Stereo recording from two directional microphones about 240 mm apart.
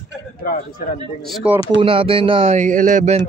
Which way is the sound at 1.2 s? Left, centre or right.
Centre.